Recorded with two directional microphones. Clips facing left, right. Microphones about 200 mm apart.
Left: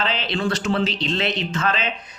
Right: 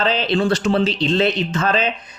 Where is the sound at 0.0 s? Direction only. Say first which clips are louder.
Right 6 dB; 35° right (ahead or behind).